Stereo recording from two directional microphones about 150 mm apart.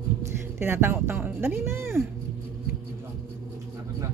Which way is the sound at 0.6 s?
15° right (ahead or behind).